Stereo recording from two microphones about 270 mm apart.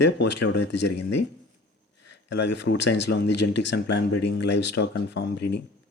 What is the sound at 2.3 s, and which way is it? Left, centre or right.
Speech, left.